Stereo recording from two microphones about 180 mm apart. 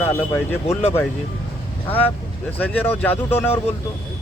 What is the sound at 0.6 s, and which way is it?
Speech, 35° left (ahead or behind).